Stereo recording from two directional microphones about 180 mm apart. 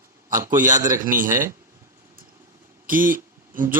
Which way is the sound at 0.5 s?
45° right (ahead or behind).